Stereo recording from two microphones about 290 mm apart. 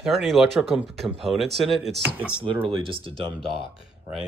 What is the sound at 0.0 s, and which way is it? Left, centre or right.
Speech, centre.